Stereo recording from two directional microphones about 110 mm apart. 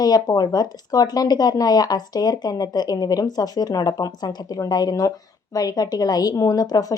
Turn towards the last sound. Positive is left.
turn(degrees=35)  # may be behind; listen again after turning